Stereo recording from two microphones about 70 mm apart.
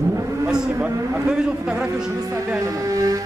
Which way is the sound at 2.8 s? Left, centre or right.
Right.